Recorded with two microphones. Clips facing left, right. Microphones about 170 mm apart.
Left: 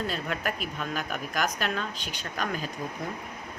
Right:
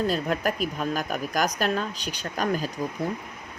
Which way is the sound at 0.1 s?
40° right (ahead or behind).